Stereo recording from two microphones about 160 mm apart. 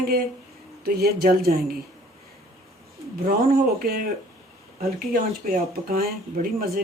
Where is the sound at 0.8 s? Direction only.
75° right (ahead or behind).